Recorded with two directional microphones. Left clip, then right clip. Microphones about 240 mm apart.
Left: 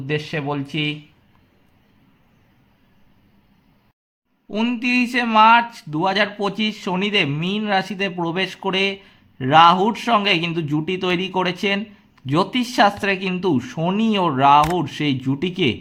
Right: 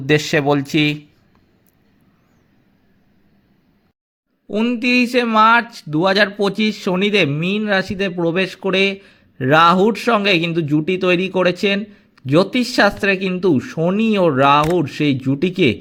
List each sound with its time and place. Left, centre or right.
0.0 s speech: right
4.4 s speech: centre